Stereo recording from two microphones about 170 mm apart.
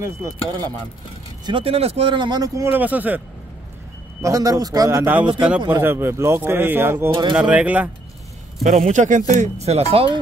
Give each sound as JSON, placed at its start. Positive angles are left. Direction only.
{"t": 0.0, "sound": "speech", "side_deg": -20}
{"t": 1.4, "sound": "speech", "side_deg": -30}
{"t": 4.2, "sound": "a man's voice", "side_deg": -20}
{"t": 8.6, "sound": "speech", "side_deg": -45}